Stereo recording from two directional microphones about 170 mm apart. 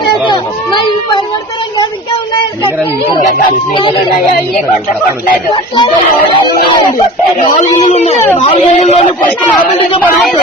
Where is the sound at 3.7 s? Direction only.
30° left (ahead or behind).